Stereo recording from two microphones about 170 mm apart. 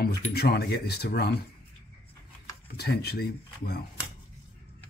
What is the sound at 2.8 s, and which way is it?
Speech, 70° left (ahead or behind).